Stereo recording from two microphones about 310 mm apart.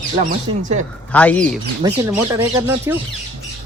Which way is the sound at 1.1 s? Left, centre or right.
Centre.